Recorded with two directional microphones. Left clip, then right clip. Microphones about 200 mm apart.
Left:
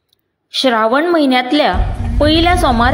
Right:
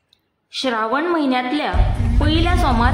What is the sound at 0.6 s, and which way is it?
A woman's voice, 35° left (ahead or behind).